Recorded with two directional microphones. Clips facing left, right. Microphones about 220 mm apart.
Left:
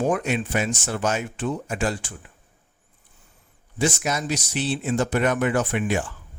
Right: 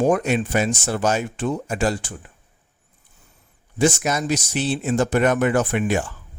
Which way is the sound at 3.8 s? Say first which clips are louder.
Right 4 dB; 50° right (ahead or behind).